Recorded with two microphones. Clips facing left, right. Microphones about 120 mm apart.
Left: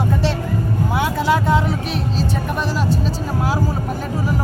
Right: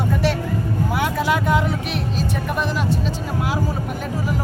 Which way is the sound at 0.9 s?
25° left (ahead or behind).